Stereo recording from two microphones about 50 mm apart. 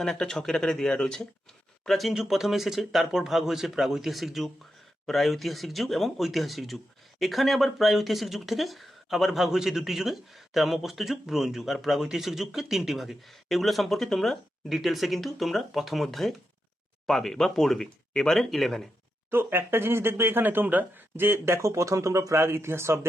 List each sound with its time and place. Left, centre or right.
0.0 s speech: centre
19.3 s speech: right